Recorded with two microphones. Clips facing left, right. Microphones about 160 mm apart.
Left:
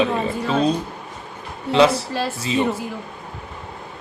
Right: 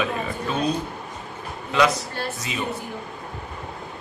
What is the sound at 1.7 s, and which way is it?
Speech, 30° left (ahead or behind).